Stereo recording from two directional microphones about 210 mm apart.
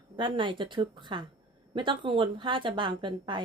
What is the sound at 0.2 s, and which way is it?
A woman's voice, 25° right (ahead or behind).